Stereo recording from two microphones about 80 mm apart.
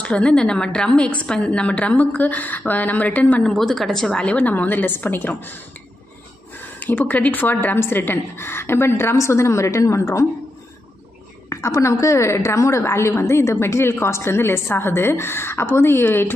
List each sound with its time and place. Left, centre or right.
0.0 s a woman's voice: centre
3.4 s a woman's voice: centre; by 5.6 s left
6.8 s a woman's voice: left
11.4 s a woman's voice: left